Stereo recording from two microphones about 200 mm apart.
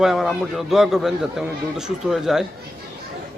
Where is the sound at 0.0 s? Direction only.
Centre (ahead or behind).